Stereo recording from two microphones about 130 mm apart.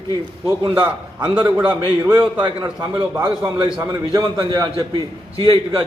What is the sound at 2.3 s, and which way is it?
Speech, 35° right (ahead or behind).